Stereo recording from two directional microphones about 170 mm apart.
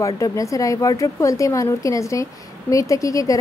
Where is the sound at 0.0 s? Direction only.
20° left (ahead or behind).